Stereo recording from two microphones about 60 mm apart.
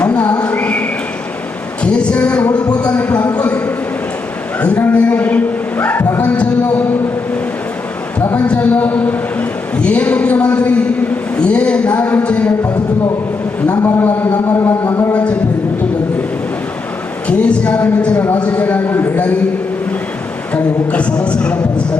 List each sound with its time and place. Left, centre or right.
0.0 s whistling: left
1.8 s a sound: centre
4.9 s a sound: left
6.2 s music: left
8.4 s a sound: left
13.7 s a man's voice: left
15.1 s speech: centre
17.2 s speech: left
20.5 s speech: left